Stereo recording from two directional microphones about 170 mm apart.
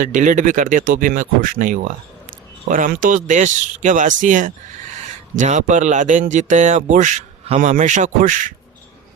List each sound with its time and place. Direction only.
0.0 s speech: 50° right (ahead or behind)